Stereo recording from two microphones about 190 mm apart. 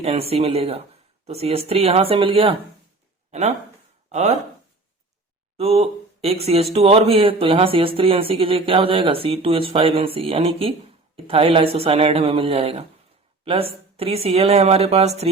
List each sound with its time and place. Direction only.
0.0 s speech: 30° right (ahead or behind)
4.1 s speech: 35° right (ahead or behind)
5.5 s speech: 30° right (ahead or behind)